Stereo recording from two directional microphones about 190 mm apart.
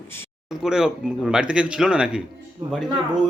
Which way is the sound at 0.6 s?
5° right (ahead or behind).